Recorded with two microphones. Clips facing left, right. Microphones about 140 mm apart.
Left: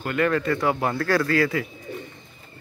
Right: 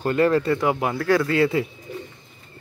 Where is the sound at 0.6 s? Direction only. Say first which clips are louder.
Right 1 dB; 15° right (ahead or behind).